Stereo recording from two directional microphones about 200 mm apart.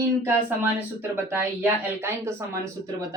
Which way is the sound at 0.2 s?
10° right (ahead or behind).